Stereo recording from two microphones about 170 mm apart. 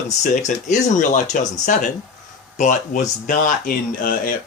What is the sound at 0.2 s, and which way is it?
Speech, 45° left (ahead or behind).